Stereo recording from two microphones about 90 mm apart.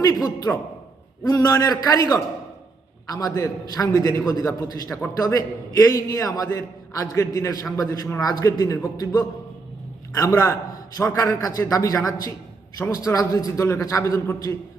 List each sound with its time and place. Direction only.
0.0 s a man's voice: 45° left (ahead or behind)